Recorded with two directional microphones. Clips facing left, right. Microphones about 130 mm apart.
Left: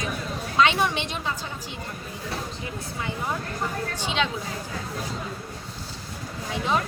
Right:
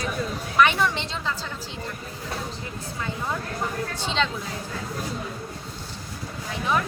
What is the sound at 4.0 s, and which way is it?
Speech, 10° left (ahead or behind).